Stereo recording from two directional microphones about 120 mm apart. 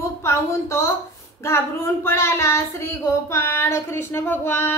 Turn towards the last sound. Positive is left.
turn(degrees=20)  # may be behind; listen again after turning